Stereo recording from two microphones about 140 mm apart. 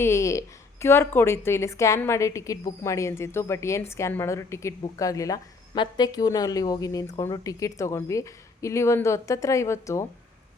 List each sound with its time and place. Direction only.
0.0 s speech: 20° left (ahead or behind)